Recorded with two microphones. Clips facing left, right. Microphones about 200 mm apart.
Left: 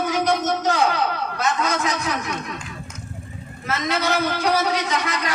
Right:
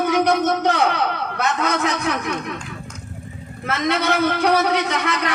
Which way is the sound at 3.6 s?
60° right (ahead or behind).